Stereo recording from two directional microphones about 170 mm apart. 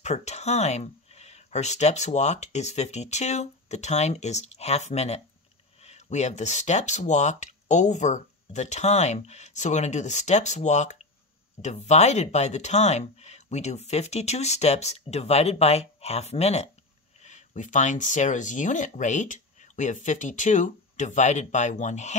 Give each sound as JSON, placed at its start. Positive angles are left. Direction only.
{"t": 0.0, "sound": "speech", "side_deg": 40}